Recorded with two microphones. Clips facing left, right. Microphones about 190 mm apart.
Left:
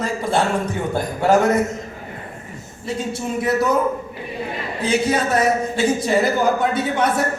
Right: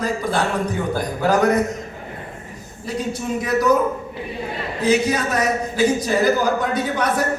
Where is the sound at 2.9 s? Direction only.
30° left (ahead or behind).